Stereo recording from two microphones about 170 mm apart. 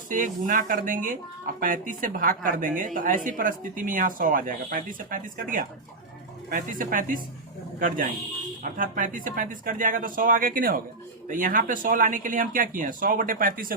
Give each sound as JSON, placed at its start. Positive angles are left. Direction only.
{"t": 0.1, "sound": "a woman's voice", "side_deg": -50}